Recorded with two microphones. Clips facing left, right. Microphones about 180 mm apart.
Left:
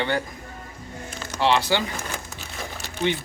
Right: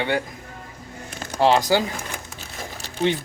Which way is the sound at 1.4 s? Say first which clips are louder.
Right 4 dB; 40° right (ahead or behind).